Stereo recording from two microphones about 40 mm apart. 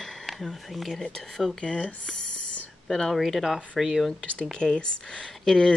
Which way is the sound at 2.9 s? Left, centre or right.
Centre.